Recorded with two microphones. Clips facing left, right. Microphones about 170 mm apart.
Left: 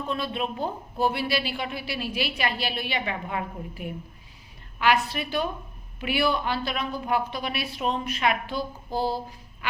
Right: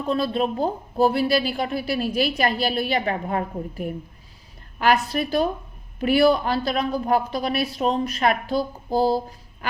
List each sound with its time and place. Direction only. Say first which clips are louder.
0.1 s a woman's voice: right 8 dB; 35° right (ahead or behind)